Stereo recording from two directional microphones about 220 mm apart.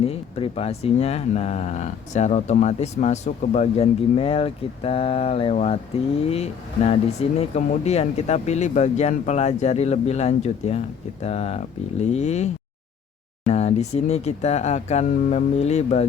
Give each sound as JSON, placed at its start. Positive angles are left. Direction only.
{"t": 0.0, "sound": "speech", "side_deg": 25}